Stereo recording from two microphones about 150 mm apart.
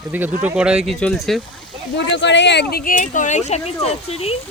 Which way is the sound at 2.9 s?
55° left (ahead or behind).